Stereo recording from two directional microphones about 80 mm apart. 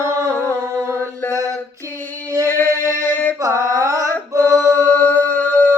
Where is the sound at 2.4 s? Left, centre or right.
Left.